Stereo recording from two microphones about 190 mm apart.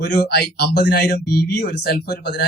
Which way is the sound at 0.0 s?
60° left (ahead or behind).